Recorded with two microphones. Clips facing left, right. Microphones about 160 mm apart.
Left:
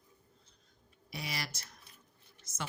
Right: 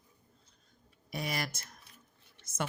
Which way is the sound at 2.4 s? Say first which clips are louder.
Right 6 dB; 55° right (ahead or behind).